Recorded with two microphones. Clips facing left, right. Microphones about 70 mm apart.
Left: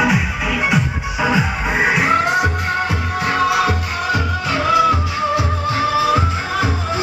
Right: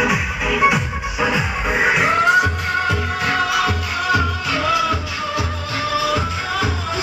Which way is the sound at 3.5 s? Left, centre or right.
Left.